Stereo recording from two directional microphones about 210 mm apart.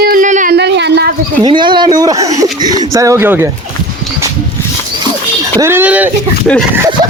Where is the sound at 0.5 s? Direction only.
55° right (ahead or behind).